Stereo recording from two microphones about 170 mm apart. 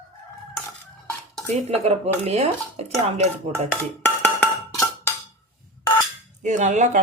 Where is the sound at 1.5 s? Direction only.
40° right (ahead or behind).